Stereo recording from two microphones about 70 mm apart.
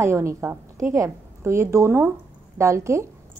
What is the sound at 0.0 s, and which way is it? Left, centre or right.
A woman's voice, right.